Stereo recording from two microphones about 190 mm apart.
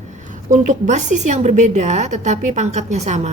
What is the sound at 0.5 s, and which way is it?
A woman's voice, 40° right (ahead or behind).